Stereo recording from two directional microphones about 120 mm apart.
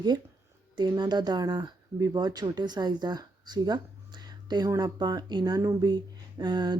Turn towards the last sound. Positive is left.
turn(degrees=-35)  # may be behind; listen again after turning